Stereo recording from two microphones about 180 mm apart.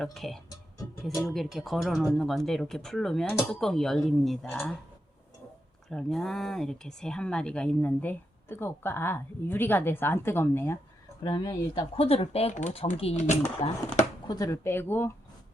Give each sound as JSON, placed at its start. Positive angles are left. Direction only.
{"t": 0.0, "sound": "speech", "side_deg": 0}
{"t": 5.9, "sound": "speech", "side_deg": 5}
{"t": 11.2, "sound": "speech", "side_deg": 25}
{"t": 11.9, "sound": "speech", "side_deg": 35}
{"t": 14.3, "sound": "speech", "side_deg": 20}